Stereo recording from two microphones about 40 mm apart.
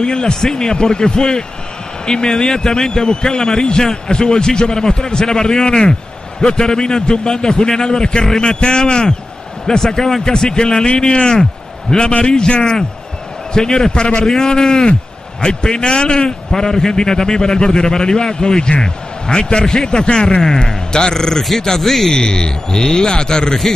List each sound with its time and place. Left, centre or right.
0.0 s a man's voice: left
22.1 s a man's voice: left